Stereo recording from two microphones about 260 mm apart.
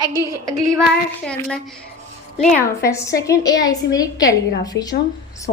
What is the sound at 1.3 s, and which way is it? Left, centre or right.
A woman's voice, centre.